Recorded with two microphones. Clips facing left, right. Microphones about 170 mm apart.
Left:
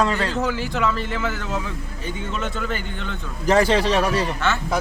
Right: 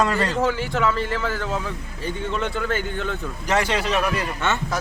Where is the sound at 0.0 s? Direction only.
Centre (ahead or behind).